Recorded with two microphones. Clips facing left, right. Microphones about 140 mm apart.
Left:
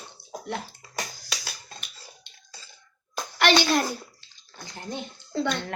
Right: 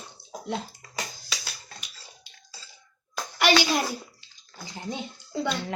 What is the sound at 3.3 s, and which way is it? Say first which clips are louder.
A child's voice: left 1 dB; 10° right (ahead or behind).